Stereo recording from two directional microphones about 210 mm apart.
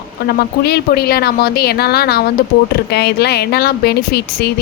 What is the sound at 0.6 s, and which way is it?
A woman's voice, 50° left (ahead or behind).